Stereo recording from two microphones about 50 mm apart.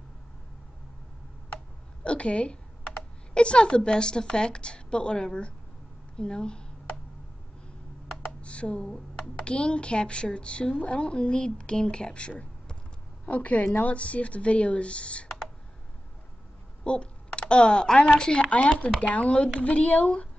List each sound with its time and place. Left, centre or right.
2.0 s a woman's voice: left
8.4 s a sound: left
9.4 s a woman's voice: left
16.8 s typing: left
17.9 s a woman's voice: left